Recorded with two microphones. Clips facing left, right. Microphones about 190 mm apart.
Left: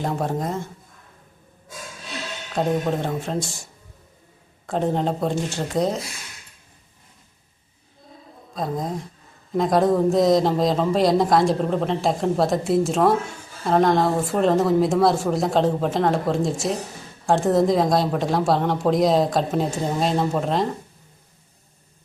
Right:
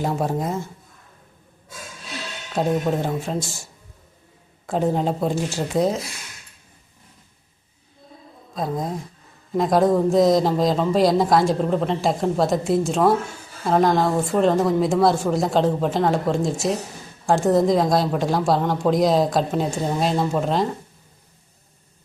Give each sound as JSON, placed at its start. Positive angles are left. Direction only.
{"t": 0.0, "sound": "speech", "side_deg": -5}
{"t": 2.6, "sound": "speech", "side_deg": -5}
{"t": 8.5, "sound": "speech", "side_deg": 0}